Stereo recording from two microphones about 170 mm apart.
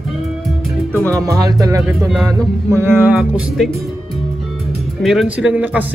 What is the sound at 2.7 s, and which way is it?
Speech, 15° right (ahead or behind).